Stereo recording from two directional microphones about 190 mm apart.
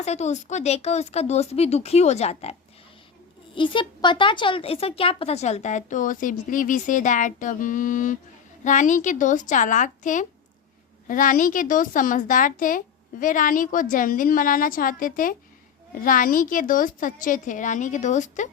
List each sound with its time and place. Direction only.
0.0 s speech: 35° left (ahead or behind)